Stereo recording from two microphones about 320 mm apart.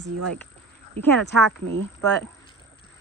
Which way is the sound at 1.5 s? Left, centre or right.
Right.